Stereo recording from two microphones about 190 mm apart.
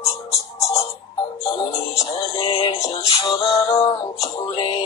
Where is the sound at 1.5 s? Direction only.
25° left (ahead or behind).